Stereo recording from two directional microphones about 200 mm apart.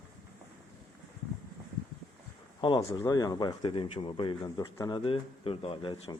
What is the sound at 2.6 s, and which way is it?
Speech, 20° left (ahead or behind).